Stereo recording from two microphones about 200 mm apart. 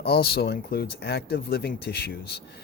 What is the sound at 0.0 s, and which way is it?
Speech, 50° left (ahead or behind).